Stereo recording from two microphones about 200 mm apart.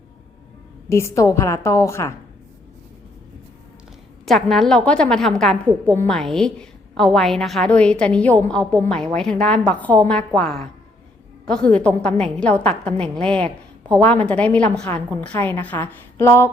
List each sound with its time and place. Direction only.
0.9 s a woman's voice: 15° left (ahead or behind)
4.3 s a woman's voice: centre (ahead or behind)